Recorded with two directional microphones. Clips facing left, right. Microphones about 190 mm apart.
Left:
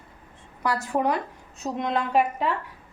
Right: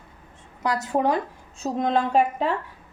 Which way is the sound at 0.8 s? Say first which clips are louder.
Right 3 dB; 25° right (ahead or behind).